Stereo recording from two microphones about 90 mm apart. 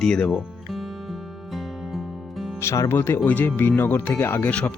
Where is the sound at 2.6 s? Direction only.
35° left (ahead or behind).